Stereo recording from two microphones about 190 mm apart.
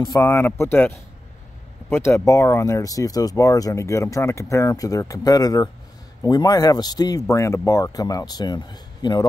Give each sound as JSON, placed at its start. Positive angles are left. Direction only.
{"t": 0.0, "sound": "speech", "side_deg": 15}